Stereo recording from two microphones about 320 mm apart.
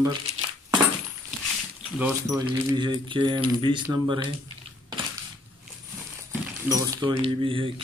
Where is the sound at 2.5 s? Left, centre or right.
Centre.